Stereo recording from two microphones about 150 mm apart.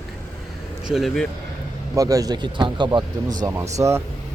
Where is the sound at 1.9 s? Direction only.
25° right (ahead or behind).